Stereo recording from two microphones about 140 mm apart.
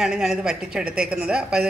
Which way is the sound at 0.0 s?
5° right (ahead or behind).